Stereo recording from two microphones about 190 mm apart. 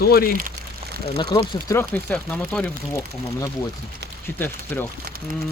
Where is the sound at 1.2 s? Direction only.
20° left (ahead or behind).